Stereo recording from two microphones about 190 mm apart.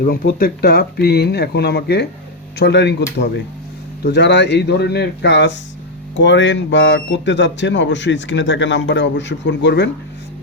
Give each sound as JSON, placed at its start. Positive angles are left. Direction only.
{"t": 0.0, "sound": "speech", "side_deg": 50}
{"t": 4.0, "sound": "speech", "side_deg": 65}